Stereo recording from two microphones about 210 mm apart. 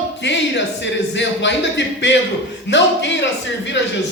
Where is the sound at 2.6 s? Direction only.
60° left (ahead or behind).